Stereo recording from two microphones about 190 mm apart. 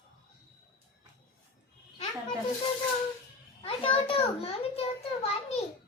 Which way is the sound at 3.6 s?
30° left (ahead or behind).